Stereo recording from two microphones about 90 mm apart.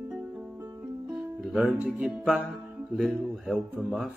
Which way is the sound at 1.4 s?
Centre (ahead or behind).